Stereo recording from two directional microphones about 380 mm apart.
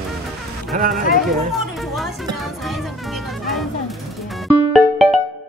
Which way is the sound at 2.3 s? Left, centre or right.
Centre.